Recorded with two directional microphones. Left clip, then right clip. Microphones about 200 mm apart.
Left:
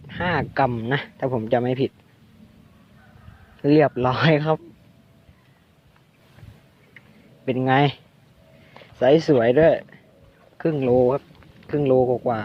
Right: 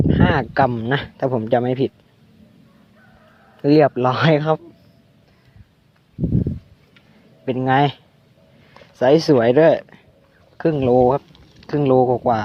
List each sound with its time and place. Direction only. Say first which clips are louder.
0.1 s speech: even; 15° right (ahead or behind)
3.6 s speech: right 3 dB; 15° right (ahead or behind)
7.4 s speech: right 2 dB; 10° right (ahead or behind)
8.7 s a sound: right 2 dB; 15° right (ahead or behind)
9.4 s speech: right 3 dB; 20° right (ahead or behind)